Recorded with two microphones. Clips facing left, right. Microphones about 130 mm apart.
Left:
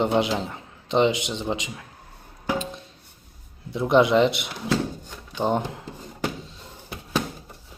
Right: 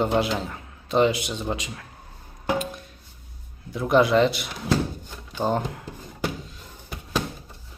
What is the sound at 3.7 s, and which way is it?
Speech, 25° left (ahead or behind).